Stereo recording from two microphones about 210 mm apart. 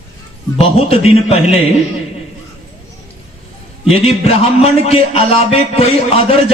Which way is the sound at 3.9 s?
30° left (ahead or behind).